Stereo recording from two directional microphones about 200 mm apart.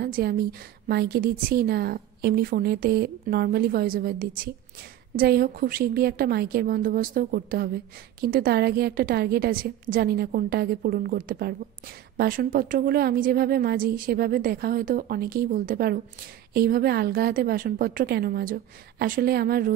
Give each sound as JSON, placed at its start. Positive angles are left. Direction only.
{"t": 0.0, "sound": "a woman's voice", "side_deg": -50}